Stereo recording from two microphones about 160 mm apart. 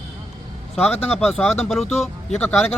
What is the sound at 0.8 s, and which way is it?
Speech, 5° left (ahead or behind).